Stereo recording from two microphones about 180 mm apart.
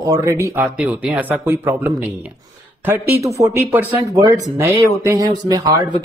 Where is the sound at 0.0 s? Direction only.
20° right (ahead or behind).